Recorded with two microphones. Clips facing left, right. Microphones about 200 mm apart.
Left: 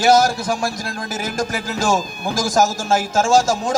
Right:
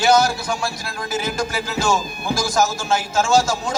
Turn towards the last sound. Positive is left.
turn(degrees=45)  # may be behind; listen again after turning